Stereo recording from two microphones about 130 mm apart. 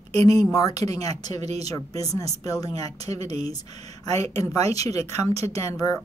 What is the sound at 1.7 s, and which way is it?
Speech, 25° left (ahead or behind).